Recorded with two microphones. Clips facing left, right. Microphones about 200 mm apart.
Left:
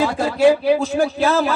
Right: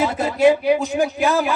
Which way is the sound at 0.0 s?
20° right (ahead or behind).